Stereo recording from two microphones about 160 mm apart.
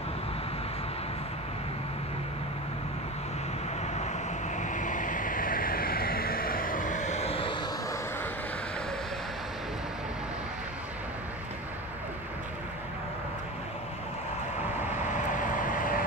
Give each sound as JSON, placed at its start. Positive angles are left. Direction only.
{"t": 3.8, "sound": "vehicle", "side_deg": 45}
{"t": 15.3, "sound": "vehicle", "side_deg": 60}